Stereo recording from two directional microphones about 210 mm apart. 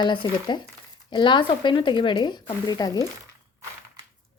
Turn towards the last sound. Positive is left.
turn(degrees=20)  # may be behind; listen again after turning